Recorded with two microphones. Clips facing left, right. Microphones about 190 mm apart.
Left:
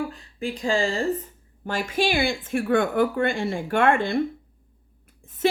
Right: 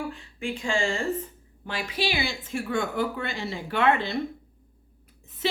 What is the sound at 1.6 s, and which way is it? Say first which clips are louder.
A woman's voice: left 5 dB; 45° left (ahead or behind).